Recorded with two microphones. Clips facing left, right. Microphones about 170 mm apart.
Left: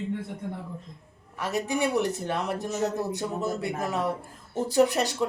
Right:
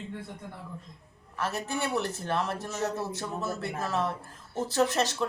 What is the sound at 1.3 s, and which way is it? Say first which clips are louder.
Speech: left 4 dB; 15° left (ahead or behind).